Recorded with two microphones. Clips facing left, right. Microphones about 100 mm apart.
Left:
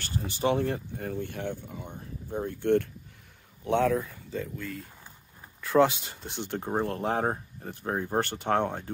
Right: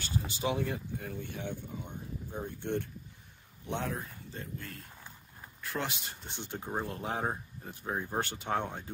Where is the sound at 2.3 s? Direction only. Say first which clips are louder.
Left 10 dB; 85° left.